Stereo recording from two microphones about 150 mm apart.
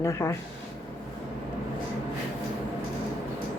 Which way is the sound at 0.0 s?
20° left (ahead or behind).